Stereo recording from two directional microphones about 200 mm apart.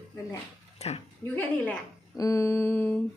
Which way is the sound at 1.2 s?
20° right (ahead or behind).